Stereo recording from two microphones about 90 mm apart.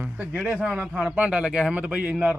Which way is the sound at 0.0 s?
20° right (ahead or behind).